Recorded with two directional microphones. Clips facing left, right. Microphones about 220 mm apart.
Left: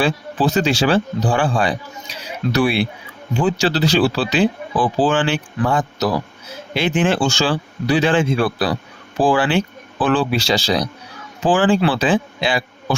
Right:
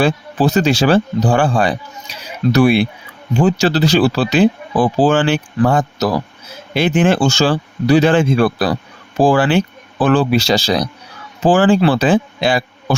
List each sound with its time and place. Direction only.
0.0 s speech: 45° right (ahead or behind)